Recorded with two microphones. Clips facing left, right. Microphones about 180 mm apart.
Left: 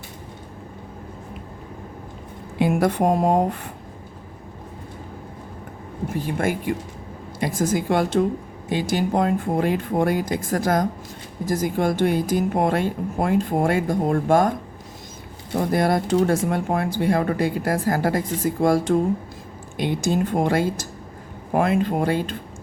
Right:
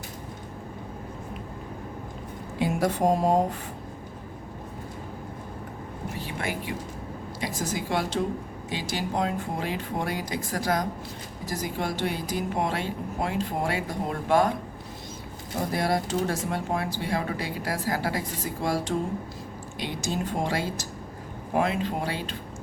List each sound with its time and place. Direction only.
2.6 s a woman's voice: 60° left (ahead or behind)
6.1 s speech: 50° left (ahead or behind)
15.7 s speech: 55° left (ahead or behind)